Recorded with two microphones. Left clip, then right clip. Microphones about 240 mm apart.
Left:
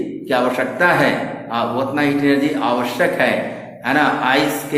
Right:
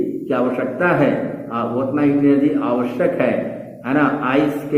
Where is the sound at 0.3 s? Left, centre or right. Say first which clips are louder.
Left 4 dB; centre.